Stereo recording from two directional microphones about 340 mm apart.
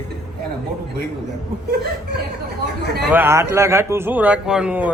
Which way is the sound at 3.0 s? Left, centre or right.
Centre.